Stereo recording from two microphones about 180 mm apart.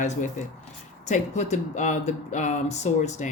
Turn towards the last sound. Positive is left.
turn(degrees=40)  # may be behind; listen again after turning